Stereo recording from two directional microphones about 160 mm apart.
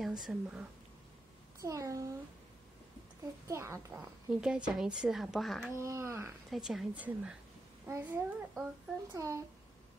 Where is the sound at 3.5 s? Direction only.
15° right (ahead or behind).